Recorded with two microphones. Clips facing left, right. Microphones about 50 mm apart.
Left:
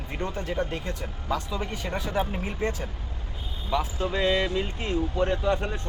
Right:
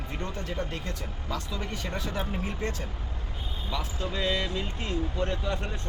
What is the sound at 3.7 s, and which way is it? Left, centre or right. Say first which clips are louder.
Speech: left 7 dB; left.